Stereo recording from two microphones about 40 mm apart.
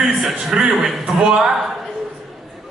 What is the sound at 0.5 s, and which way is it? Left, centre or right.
A man's voice, centre.